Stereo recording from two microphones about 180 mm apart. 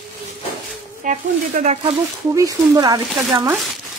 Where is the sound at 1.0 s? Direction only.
45° right (ahead or behind).